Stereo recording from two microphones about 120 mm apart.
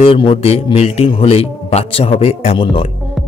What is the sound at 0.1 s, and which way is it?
A man's voice, 45° left (ahead or behind).